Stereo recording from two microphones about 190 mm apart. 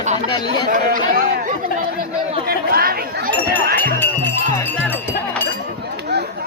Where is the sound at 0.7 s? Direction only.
45° right (ahead or behind).